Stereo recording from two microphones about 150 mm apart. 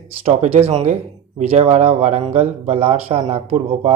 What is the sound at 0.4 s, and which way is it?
Speech, 45° right (ahead or behind).